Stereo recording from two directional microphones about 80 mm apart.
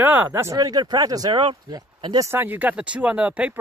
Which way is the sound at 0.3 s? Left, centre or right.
Right.